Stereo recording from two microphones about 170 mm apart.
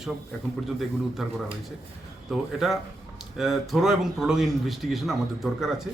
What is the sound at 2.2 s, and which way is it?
Speech, centre (ahead or behind).